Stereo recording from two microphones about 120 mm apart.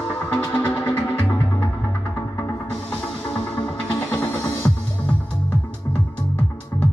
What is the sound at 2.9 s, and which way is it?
Music, 15° left (ahead or behind).